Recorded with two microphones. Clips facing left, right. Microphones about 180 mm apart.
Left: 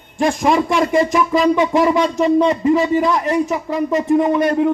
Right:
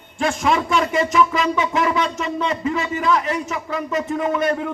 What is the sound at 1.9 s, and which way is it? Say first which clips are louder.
A man's voice: left 7 dB; 15° left (ahead or behind).